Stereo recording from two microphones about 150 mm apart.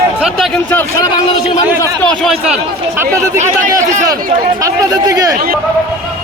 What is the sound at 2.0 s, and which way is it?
Speech, 5° left (ahead or behind).